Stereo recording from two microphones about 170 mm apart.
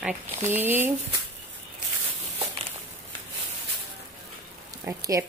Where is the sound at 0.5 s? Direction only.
10° right (ahead or behind).